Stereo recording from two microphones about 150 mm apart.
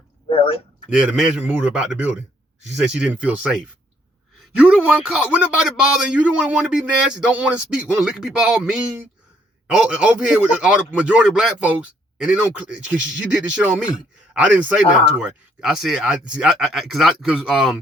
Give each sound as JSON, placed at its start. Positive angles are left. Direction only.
{"t": 0.3, "sound": "speech", "side_deg": 40}
{"t": 0.9, "sound": "speech", "side_deg": -5}